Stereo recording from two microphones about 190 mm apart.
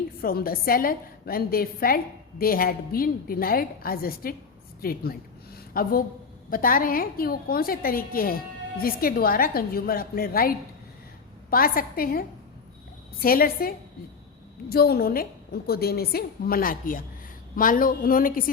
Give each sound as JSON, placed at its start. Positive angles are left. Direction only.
{"t": 0.2, "sound": "a woman's voice", "side_deg": 50}
{"t": 11.5, "sound": "a woman's voice", "side_deg": 50}